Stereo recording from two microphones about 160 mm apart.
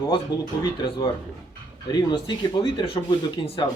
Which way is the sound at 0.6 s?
30° left (ahead or behind).